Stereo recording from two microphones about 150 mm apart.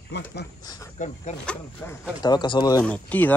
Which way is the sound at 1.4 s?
5° left (ahead or behind).